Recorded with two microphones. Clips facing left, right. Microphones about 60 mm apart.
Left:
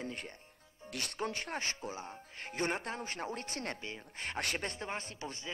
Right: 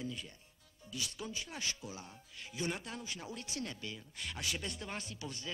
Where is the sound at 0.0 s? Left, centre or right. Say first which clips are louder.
Left 1 dB; left.